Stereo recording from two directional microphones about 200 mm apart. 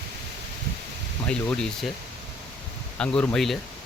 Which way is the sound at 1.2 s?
5° left (ahead or behind).